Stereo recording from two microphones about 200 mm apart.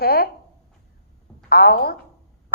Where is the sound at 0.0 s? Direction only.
50° left (ahead or behind).